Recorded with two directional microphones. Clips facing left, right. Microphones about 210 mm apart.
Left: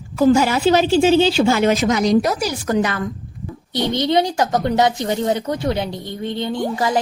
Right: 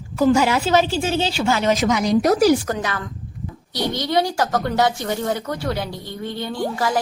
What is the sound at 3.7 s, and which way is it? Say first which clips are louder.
A woman's voice: left 3 dB; 25° left (ahead or behind).